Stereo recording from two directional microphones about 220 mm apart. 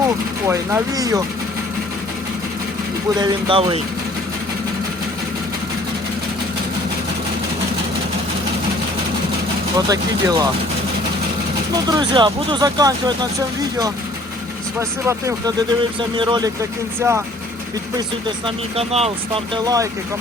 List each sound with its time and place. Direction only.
0.4 s speech: 15° right (ahead or behind)
3.2 s speech: 20° right (ahead or behind)
9.7 s speech: 15° right (ahead or behind)
11.7 s speech: 20° right (ahead or behind)
14.8 s speech: 10° right (ahead or behind)
18.4 s speech: 25° right (ahead or behind)
19.6 s speech: 15° right (ahead or behind)